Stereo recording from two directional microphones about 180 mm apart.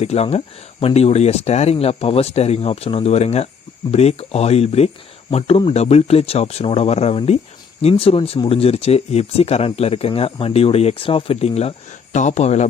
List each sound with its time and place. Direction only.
0.0 s speech: 35° left (ahead or behind)